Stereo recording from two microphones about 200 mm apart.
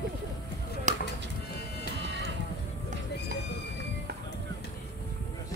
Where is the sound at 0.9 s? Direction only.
35° right (ahead or behind).